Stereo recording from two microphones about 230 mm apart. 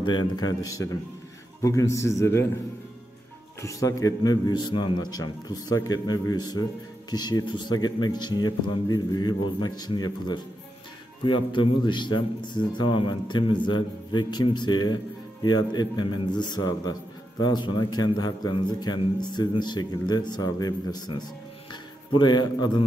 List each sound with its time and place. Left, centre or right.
0.0 s a man's voice: centre
3.6 s a man's voice: centre
22.2 s a man's voice: centre